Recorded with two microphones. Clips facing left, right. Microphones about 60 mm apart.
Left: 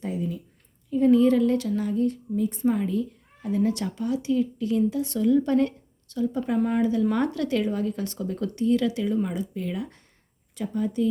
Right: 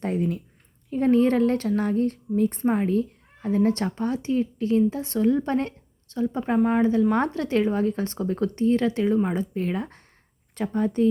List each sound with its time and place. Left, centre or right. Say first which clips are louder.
0.0 s speech: right 4 dB; right
0.9 s a woman's voice: left 1 dB; right